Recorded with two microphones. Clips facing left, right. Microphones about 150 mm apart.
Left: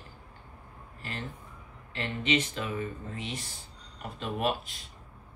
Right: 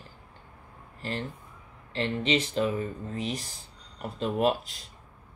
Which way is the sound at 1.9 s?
35° right (ahead or behind).